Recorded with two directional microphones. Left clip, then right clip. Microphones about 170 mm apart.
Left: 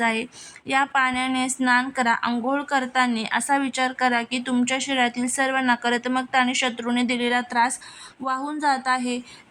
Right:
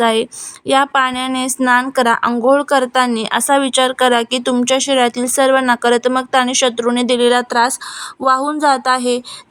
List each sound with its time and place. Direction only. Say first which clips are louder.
0.0 s speech: right 9 dB; 35° right (ahead or behind)